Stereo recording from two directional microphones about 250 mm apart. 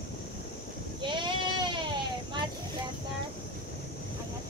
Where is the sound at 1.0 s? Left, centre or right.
Centre.